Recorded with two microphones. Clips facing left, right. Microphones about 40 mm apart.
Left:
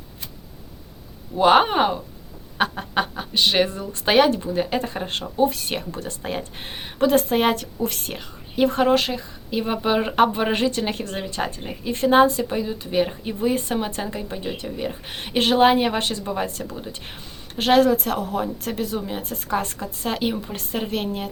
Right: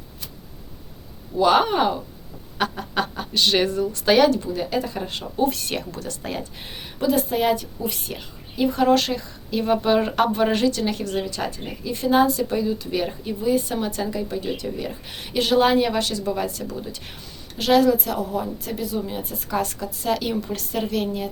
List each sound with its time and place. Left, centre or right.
1.4 s speech: left; by 3.7 s centre
3.7 s speech: left
5.2 s speech: left
8.8 s speech: left
12.4 s speech: left
13.4 s speech: left
19.5 s speech: left